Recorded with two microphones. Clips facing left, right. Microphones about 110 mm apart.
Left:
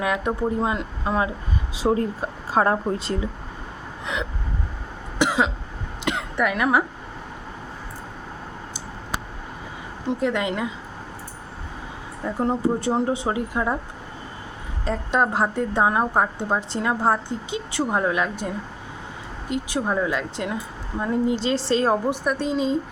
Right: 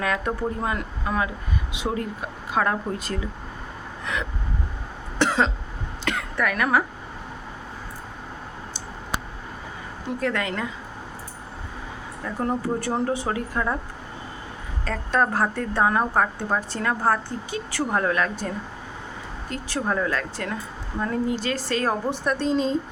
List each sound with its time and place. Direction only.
0.0 s a woman's voice: 20° left (ahead or behind)
4.0 s vehicle: 20° left (ahead or behind)
5.2 s cough: 10° left (ahead or behind)
6.1 s a woman's voice: 20° left (ahead or behind)
10.1 s speech: 20° left (ahead or behind)
12.2 s speech: 20° left (ahead or behind)
14.8 s speech: 20° left (ahead or behind)
22.1 s speech: 10° left (ahead or behind)